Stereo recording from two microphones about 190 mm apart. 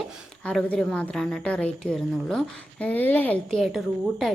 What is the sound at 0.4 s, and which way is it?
A woman's voice, 5° left (ahead or behind).